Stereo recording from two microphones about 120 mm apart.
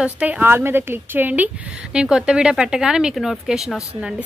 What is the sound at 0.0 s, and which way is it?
A woman's voice, 10° right (ahead or behind).